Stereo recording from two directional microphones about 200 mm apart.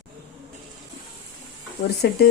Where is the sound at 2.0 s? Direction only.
55° left (ahead or behind).